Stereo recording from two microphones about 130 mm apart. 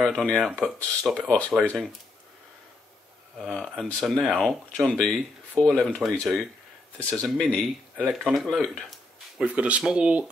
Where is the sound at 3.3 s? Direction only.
Centre (ahead or behind).